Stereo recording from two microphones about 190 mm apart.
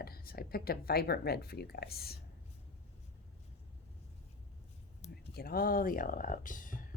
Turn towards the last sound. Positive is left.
turn(degrees=45)  # may be behind; listen again after turning